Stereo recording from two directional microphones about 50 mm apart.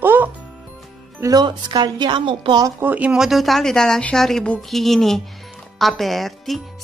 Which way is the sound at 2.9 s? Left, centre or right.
Right.